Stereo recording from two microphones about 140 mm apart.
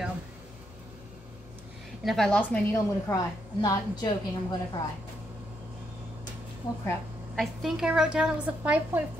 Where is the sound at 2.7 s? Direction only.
25° left (ahead or behind).